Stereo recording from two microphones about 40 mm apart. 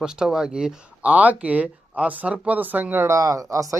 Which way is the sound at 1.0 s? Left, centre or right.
Right.